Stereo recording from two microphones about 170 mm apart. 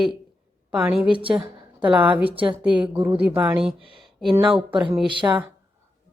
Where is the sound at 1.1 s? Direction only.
30° right (ahead or behind).